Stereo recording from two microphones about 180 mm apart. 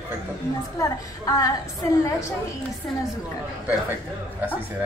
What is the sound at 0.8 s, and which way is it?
Speech, 20° left (ahead or behind).